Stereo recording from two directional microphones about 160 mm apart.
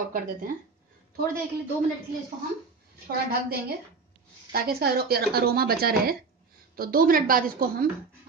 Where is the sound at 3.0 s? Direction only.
70° right (ahead or behind).